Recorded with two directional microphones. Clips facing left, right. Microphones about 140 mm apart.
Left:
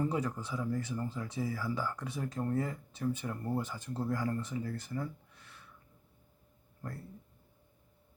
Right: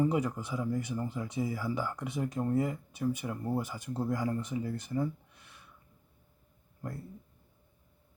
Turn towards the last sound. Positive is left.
turn(degrees=-15)  # may be behind; listen again after turning